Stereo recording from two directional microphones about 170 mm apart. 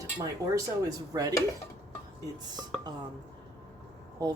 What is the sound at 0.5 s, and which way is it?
Speech, 20° right (ahead or behind).